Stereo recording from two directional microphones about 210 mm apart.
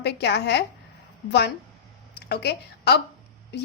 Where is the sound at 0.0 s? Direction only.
55° left (ahead or behind).